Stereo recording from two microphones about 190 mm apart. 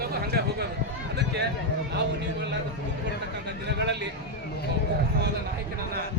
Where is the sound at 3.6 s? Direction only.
65° right (ahead or behind).